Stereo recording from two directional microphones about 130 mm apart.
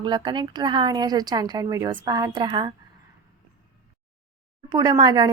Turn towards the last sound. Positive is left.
turn(degrees=-30)  # may be behind; listen again after turning